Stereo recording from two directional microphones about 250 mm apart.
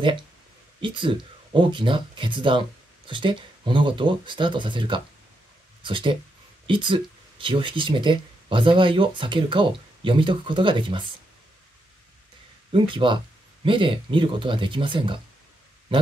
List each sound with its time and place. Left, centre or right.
0.7 s speech: centre
12.7 s speech: centre